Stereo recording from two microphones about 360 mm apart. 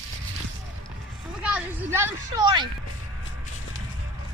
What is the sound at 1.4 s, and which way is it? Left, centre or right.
Speech, centre.